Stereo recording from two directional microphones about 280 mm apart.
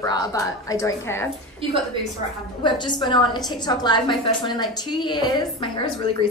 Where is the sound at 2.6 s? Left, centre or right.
Centre.